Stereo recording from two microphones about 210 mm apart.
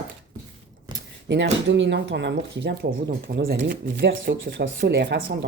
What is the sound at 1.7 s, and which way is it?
Speech, 60° right (ahead or behind).